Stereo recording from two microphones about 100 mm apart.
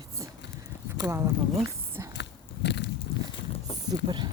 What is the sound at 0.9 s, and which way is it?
Speech, 25° right (ahead or behind).